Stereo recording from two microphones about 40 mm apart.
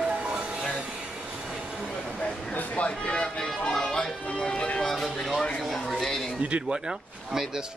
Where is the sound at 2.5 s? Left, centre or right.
Left.